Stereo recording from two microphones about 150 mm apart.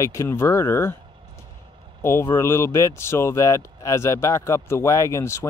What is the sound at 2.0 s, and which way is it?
Speech, 15° left (ahead or behind).